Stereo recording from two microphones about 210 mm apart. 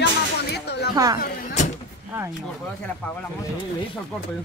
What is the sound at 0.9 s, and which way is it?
Speech, 15° right (ahead or behind).